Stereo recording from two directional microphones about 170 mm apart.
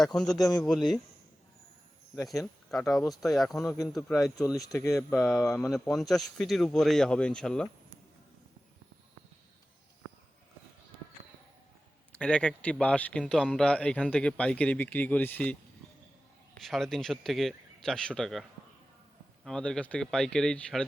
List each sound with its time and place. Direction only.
0.0 s speech: 5° left (ahead or behind)
2.2 s speech: centre (ahead or behind)
4.4 s speech: 20° left (ahead or behind)
5.2 s speech: centre (ahead or behind)
12.1 s speech: 5° left (ahead or behind)
16.6 s speech: centre (ahead or behind)
19.5 s speech: 5° left (ahead or behind)